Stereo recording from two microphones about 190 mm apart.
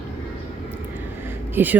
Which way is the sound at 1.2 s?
10° right (ahead or behind).